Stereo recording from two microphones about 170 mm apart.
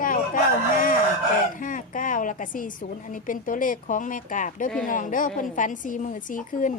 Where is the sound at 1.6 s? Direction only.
50° left (ahead or behind).